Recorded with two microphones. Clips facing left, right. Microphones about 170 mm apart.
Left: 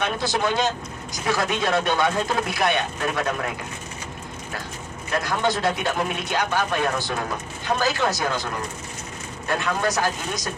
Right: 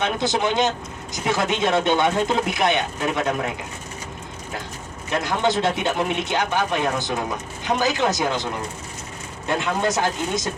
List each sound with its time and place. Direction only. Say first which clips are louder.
0.0 s speech: right 2 dB; 20° right (ahead or behind)
5.1 s speech: right 2 dB; 25° right (ahead or behind)
9.5 s speech: right 2 dB; 20° right (ahead or behind)